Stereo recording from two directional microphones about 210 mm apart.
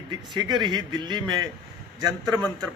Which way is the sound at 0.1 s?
20° right (ahead or behind).